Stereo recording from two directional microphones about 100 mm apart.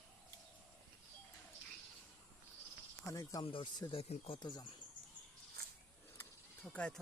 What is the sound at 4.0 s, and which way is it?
Speech, 80° left.